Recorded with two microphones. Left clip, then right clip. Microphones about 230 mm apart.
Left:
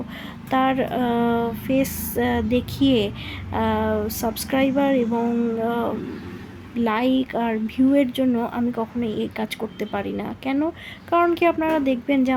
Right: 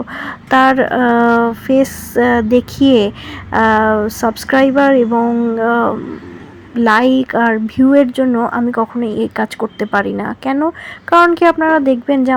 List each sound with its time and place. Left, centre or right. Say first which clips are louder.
0.2 s speech: right 11 dB; centre